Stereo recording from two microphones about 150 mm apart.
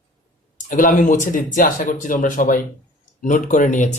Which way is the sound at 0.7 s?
60° left (ahead or behind).